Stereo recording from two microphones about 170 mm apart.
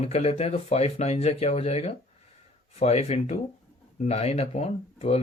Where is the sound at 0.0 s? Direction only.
40° left (ahead or behind).